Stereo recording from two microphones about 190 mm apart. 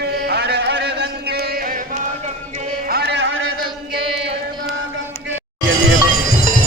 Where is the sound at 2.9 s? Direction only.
60° right (ahead or behind).